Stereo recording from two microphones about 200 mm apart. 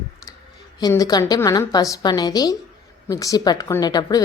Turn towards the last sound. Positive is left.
turn(degrees=20)  # may be behind; listen again after turning